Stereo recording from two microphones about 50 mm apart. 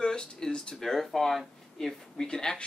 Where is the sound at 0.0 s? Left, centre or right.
Centre.